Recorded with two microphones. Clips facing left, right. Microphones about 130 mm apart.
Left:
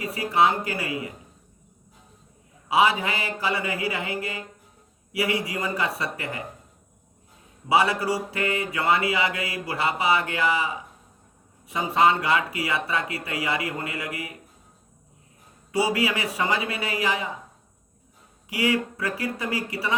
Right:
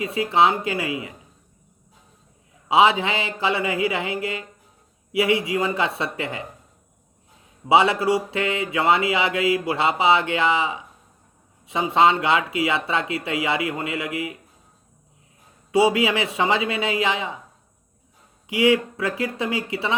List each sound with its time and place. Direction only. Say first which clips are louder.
0.0 s speech: right 3 dB; 20° right (ahead or behind)
2.6 s speech: right 4 dB; 25° right (ahead or behind)
7.7 s speech: right 4 dB; 25° right (ahead or behind)
15.7 s speech: right 5 dB; 20° right (ahead or behind)
18.4 s speech: right 6 dB; 20° right (ahead or behind)